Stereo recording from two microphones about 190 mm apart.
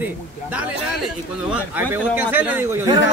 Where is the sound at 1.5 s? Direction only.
10° right (ahead or behind).